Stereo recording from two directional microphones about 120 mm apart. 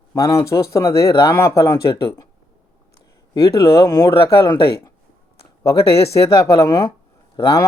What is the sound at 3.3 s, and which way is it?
Speech, 25° left (ahead or behind).